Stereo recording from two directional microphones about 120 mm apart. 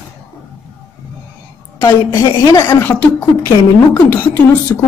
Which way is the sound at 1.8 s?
20° left (ahead or behind).